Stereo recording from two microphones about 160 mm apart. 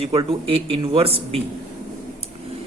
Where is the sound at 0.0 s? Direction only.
35° right (ahead or behind).